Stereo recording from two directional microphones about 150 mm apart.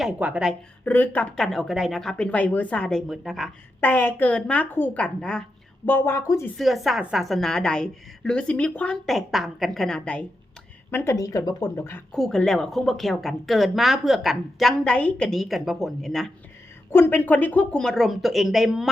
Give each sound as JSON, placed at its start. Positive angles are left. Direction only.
{"t": 0.0, "sound": "a woman's voice", "side_deg": -5}
{"t": 0.9, "sound": "speech", "side_deg": 10}
{"t": 6.6, "sound": "a woman's voice", "side_deg": 0}
{"t": 10.9, "sound": "speech", "side_deg": 20}
{"t": 12.1, "sound": "a woman's voice", "side_deg": 0}
{"t": 16.9, "sound": "a woman's voice", "side_deg": 15}